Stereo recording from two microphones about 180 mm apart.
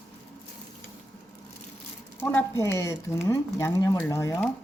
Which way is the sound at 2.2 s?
10° left (ahead or behind).